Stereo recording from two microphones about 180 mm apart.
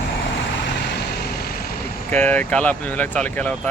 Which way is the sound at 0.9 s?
60° left (ahead or behind).